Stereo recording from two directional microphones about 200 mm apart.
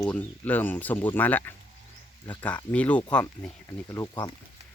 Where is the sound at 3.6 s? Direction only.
15° left (ahead or behind).